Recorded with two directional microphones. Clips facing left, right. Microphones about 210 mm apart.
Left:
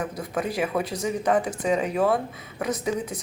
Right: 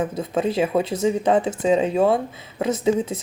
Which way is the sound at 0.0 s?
25° right (ahead or behind).